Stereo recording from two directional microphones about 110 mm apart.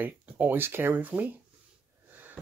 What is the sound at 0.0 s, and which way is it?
Speech, 20° right (ahead or behind).